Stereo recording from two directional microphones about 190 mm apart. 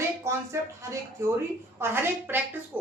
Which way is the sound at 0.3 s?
15° right (ahead or behind).